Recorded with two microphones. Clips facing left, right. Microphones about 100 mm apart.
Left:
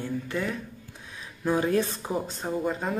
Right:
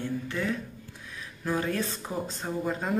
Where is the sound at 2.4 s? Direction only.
Centre (ahead or behind).